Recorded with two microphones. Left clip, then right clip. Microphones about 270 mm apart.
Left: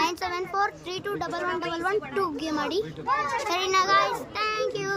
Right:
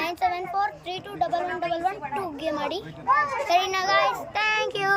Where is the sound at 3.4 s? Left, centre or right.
Left.